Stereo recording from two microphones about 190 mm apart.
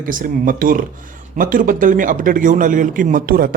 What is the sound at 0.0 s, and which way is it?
A man's voice, 45° right (ahead or behind).